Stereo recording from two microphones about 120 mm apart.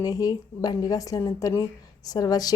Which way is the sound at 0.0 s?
30° left (ahead or behind).